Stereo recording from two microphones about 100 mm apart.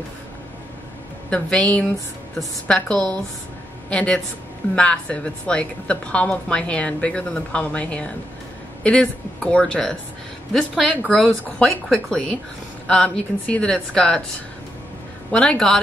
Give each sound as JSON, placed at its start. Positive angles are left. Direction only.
{"t": 1.3, "sound": "a woman's voice", "side_deg": 10}
{"t": 11.1, "sound": "a woman's voice", "side_deg": 0}
{"t": 15.3, "sound": "speech", "side_deg": 5}